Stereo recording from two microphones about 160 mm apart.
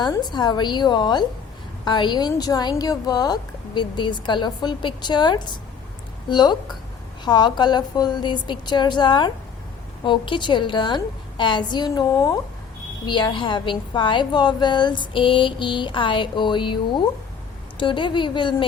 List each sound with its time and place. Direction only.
0.0 s a woman's voice: 25° left (ahead or behind)